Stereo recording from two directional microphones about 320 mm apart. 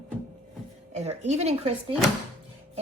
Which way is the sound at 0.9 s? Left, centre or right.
Right.